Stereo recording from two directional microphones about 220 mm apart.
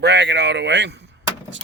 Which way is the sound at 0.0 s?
50° right (ahead or behind).